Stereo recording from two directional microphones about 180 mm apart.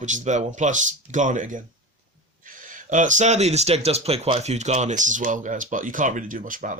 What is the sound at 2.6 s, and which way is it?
Speech, 45° right (ahead or behind).